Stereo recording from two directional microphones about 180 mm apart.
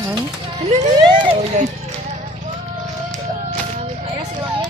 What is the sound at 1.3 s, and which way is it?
Speech, 40° right (ahead or behind).